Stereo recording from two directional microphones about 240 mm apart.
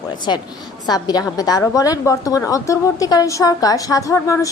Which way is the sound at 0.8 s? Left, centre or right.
Centre.